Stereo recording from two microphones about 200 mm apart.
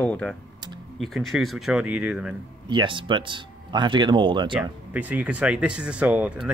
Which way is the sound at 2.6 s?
25° right (ahead or behind).